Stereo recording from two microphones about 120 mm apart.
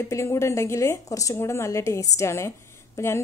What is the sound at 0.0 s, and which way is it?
Speech, 25° left (ahead or behind).